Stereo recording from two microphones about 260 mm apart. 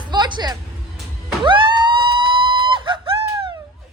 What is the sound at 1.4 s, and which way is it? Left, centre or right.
Police car, centre.